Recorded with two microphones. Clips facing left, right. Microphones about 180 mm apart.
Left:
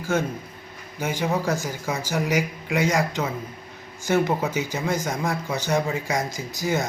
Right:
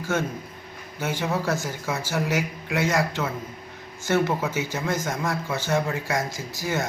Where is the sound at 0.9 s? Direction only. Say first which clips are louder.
Left 2 dB; 15° left (ahead or behind).